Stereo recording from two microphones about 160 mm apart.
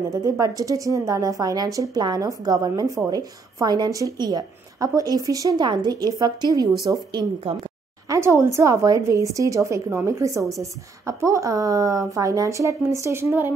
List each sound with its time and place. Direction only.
0.1 s a woman's voice: 20° right (ahead or behind)
7.5 s speech: 35° right (ahead or behind)
8.1 s a woman's voice: 20° right (ahead or behind)